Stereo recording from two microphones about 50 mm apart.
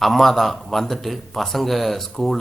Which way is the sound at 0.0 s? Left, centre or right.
Centre.